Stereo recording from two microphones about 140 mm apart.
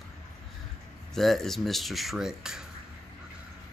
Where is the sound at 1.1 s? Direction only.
Centre (ahead or behind).